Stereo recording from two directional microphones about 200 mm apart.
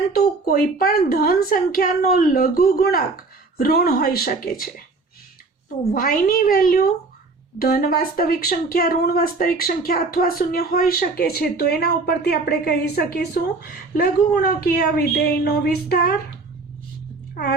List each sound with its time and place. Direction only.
0.1 s speech: 45° left (ahead or behind)
5.9 s speech: 45° left (ahead or behind)